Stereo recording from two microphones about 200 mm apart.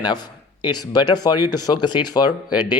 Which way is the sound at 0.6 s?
20° left (ahead or behind).